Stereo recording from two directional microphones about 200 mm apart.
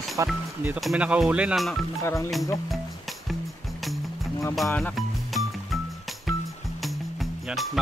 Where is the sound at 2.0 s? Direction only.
15° left (ahead or behind).